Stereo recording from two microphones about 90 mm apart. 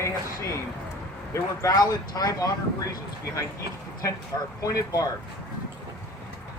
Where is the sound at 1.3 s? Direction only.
40° left (ahead or behind).